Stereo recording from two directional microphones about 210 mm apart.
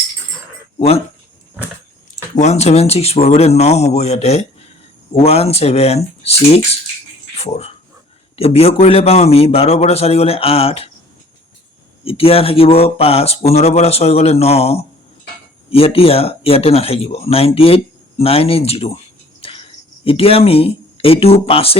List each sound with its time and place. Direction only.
0.8 s speech: 30° left (ahead or behind)
2.3 s speech: 30° left (ahead or behind)
12.0 s speech: 25° left (ahead or behind)
19.4 s a sound: 25° left (ahead or behind)